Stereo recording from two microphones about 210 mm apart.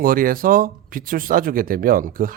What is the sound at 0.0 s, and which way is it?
Speech, 40° right (ahead or behind).